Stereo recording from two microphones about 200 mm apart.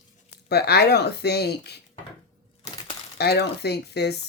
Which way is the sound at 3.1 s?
55° left (ahead or behind).